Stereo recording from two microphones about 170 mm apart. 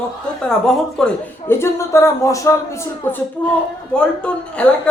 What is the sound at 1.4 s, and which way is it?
A woman's voice, 15° left (ahead or behind).